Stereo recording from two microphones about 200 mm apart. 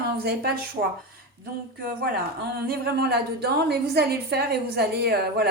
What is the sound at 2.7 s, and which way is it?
A woman's voice, 55° right (ahead or behind).